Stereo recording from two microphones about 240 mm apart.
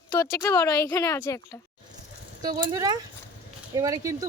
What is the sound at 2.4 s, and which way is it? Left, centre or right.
Speech, centre.